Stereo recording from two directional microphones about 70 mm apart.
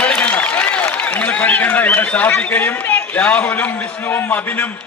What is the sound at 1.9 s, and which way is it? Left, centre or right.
A man's voice, left.